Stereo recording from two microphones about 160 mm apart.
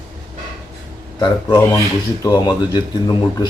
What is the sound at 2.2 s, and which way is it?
Speech, 25° left (ahead or behind).